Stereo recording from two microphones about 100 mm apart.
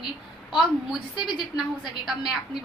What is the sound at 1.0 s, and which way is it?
Speech, 50° left (ahead or behind).